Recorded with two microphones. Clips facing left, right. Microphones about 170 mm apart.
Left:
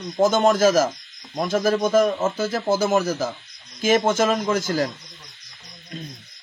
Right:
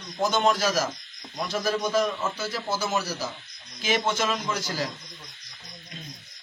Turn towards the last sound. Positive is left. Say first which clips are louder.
# left 8 dB
turn(degrees=50)  # may be behind; listen again after turning